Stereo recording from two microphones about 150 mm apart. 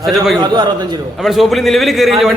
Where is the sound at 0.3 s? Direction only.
30° right (ahead or behind).